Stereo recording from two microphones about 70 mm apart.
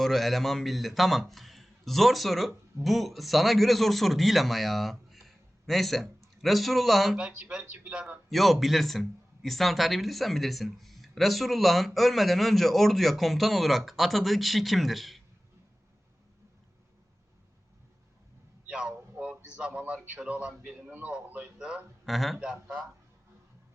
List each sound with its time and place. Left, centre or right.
0.0 s a man's voice: centre
7.2 s a man's voice: centre
8.3 s a man's voice: centre
18.7 s a sound: centre
19.5 s a man's voice: centre
22.0 s a man's voice: centre